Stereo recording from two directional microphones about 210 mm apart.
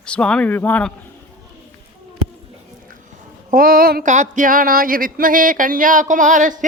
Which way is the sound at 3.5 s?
45° right (ahead or behind).